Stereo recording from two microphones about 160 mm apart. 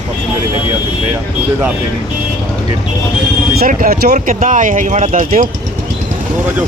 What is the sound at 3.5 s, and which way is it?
Speech, 65° right (ahead or behind).